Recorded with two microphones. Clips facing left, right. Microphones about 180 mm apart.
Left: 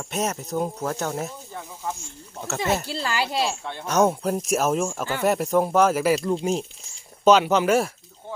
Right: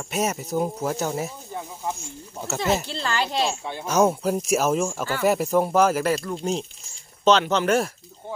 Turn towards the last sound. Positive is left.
turn(degrees=5)  # may be behind; listen again after turning